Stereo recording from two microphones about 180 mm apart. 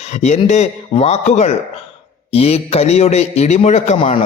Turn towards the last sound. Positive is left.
turn(degrees=35)  # may be behind; listen again after turning